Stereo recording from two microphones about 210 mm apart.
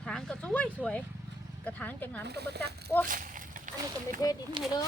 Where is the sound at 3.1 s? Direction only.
40° right (ahead or behind).